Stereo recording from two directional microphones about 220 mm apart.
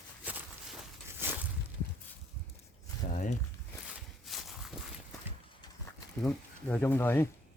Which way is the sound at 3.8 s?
Centre (ahead or behind).